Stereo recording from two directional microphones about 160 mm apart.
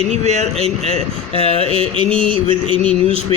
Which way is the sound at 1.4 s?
40° left (ahead or behind).